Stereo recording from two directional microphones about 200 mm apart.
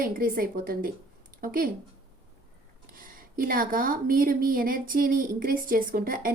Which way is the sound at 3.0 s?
45° right (ahead or behind).